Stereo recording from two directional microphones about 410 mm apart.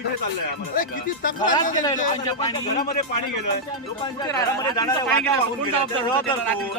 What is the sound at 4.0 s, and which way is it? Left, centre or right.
Speech, centre.